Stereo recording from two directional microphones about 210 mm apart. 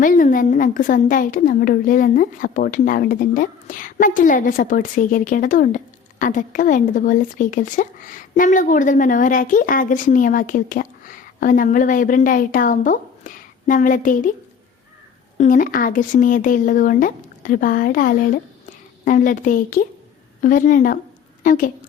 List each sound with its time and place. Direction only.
0.0 s a woman's voice: 40° left (ahead or behind)
15.4 s a woman's voice: 40° left (ahead or behind)